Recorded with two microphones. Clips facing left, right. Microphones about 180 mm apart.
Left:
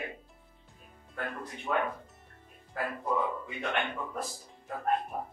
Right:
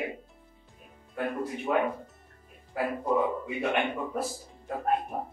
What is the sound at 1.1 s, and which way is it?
Speech, 15° right (ahead or behind).